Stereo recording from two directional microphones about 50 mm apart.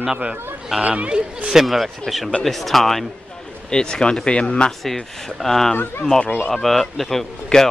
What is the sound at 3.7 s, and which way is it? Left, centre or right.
Speech, centre.